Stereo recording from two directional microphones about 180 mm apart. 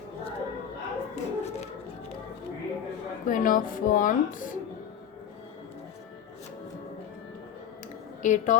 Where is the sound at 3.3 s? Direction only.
50° left (ahead or behind).